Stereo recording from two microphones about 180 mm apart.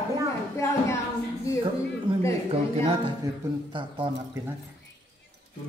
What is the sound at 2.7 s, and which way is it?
Speech, 30° right (ahead or behind).